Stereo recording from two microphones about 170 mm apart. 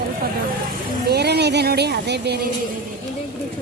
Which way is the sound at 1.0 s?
75° right (ahead or behind).